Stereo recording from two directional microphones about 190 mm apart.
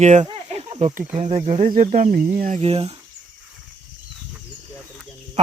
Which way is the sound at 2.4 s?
40° right (ahead or behind).